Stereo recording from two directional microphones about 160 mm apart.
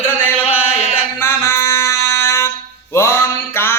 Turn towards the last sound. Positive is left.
turn(degrees=15)  # may be behind; listen again after turning